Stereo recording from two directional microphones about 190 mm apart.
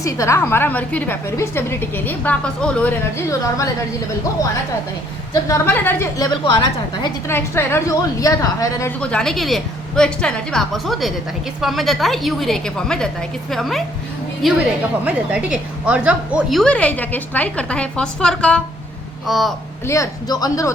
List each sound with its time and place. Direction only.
0.0 s a woman's voice: 15° left (ahead or behind)
5.3 s a woman's voice: 15° left (ahead or behind)
7.0 s a woman's voice: 15° left (ahead or behind)
9.0 s a woman's voice: 5° left (ahead or behind)
19.9 s a woman's voice: 20° left (ahead or behind)